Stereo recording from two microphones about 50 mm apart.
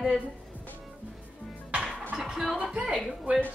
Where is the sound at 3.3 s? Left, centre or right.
Right.